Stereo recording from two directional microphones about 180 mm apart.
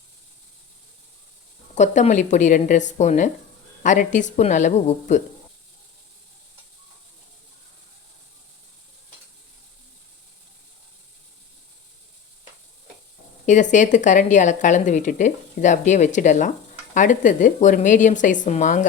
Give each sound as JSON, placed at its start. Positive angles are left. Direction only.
{"t": 1.7, "sound": "speech", "side_deg": 40}
{"t": 13.4, "sound": "speech", "side_deg": 45}